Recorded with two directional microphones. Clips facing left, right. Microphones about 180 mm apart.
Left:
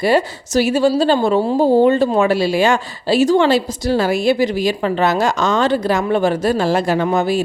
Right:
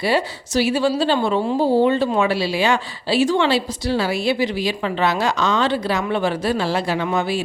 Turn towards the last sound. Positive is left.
turn(degrees=45)  # may be behind; listen again after turning